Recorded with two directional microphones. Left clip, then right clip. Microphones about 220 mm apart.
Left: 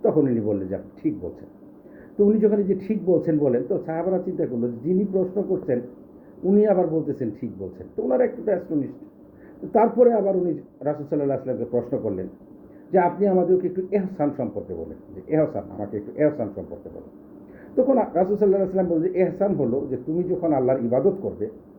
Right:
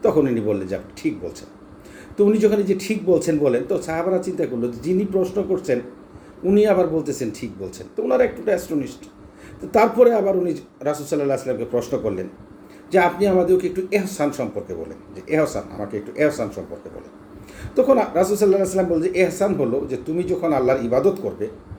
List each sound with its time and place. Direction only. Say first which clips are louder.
0.0 s speech: right 2 dB; 15° right (ahead or behind)
2.1 s speech: right 2 dB; 15° right (ahead or behind)
15.5 s speech: right 2 dB; 15° right (ahead or behind)
17.7 s speech: right 3 dB; 15° right (ahead or behind)